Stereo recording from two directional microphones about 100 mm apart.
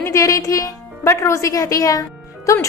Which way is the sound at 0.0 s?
30° left (ahead or behind).